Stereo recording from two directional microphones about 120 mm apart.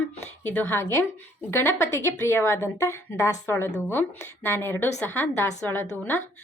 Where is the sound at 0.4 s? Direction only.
15° left (ahead or behind).